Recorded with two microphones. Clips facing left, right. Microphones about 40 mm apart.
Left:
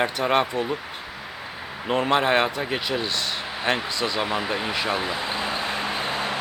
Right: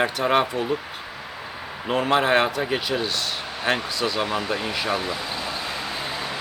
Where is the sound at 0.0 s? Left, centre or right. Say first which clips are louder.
Right 1 dB; centre.